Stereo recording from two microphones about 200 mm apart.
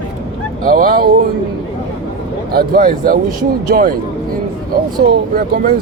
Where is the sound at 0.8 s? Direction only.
45° right (ahead or behind).